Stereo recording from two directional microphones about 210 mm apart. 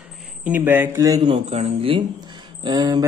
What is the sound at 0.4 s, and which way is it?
A man's voice, 10° right (ahead or behind).